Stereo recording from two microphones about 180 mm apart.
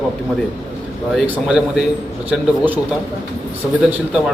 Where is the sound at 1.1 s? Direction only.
5° right (ahead or behind).